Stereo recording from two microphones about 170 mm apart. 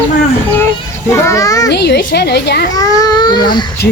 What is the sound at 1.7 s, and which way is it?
Speech, 75° left (ahead or behind).